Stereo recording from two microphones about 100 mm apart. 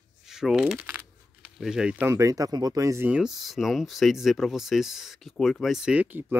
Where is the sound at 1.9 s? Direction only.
25° right (ahead or behind).